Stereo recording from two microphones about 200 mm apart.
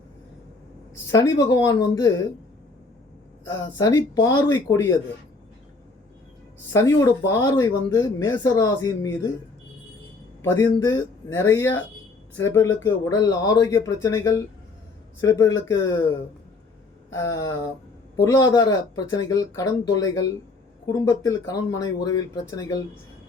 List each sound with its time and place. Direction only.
1.1 s speech: 15° left (ahead or behind)
3.8 s speech: 15° left (ahead or behind)
6.7 s speech: 15° left (ahead or behind)
10.4 s speech: 15° left (ahead or behind)